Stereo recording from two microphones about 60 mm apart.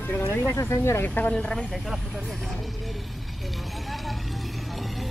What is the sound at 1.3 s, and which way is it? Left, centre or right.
Speech, centre.